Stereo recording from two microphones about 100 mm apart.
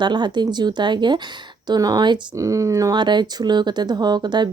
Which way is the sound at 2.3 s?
35° right (ahead or behind).